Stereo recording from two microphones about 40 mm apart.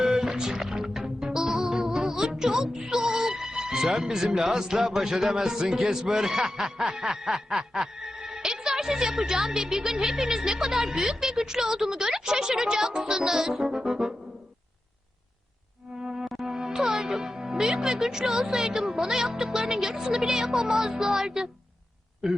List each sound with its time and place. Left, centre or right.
0.0 s music: centre
4.4 s a man's voice: centre
16.0 s music: centre
16.5 s a man's voice: centre